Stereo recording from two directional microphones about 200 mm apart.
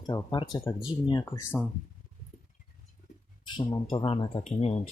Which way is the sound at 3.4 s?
20° left (ahead or behind).